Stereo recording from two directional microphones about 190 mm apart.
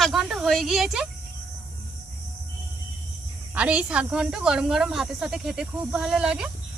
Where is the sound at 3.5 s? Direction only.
5° right (ahead or behind).